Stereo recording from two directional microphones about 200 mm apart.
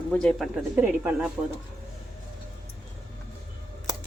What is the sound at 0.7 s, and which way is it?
Speech, 10° right (ahead or behind).